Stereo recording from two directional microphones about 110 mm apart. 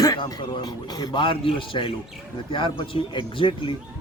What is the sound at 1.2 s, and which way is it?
A man's voice, 50° left (ahead or behind).